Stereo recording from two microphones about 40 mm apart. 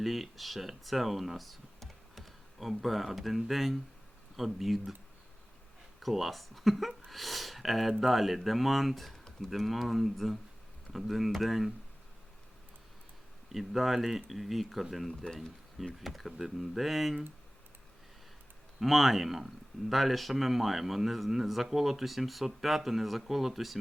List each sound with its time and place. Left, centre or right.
0.0 s a man's voice: centre
6.0 s a man's voice: centre
9.1 s a sound: centre
9.5 s a man's voice: centre
13.5 s a man's voice: centre
18.8 s a man's voice: centre